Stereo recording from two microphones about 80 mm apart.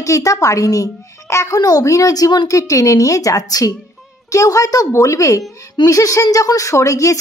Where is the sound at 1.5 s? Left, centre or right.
Left.